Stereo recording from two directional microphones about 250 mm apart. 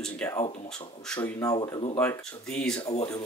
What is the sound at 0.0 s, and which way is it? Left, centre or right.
Speech, centre.